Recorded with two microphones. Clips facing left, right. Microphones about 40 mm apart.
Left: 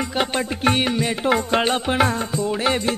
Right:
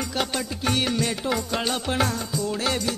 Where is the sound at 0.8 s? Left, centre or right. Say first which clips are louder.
Left 3 dB; left.